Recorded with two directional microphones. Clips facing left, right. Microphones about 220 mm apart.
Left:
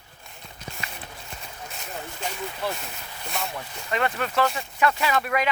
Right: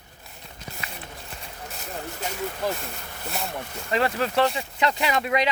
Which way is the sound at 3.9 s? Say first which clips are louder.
Right 2 dB; 30° right (ahead or behind).